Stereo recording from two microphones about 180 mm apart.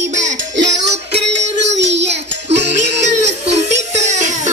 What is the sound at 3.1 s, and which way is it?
Music, 40° right (ahead or behind).